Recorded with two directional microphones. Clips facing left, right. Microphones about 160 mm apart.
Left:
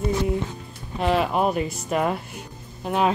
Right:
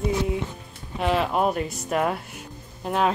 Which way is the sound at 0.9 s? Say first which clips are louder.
Left 1 dB; centre (ahead or behind).